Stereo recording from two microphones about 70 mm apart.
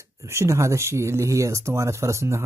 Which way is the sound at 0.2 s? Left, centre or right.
Right.